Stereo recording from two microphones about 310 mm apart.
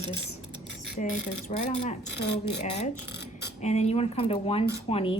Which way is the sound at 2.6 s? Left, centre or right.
Left.